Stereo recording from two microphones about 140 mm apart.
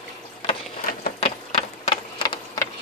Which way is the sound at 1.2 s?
45° left (ahead or behind).